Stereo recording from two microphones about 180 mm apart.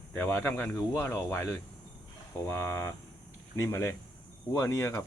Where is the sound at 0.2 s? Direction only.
10° left (ahead or behind).